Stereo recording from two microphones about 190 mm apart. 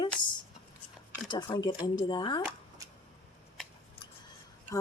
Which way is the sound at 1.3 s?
25° left (ahead or behind).